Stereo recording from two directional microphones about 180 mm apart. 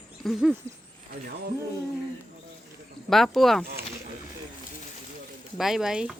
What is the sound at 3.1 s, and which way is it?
Speech, centre (ahead or behind).